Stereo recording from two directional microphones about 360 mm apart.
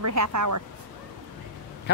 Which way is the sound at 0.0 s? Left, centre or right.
Right.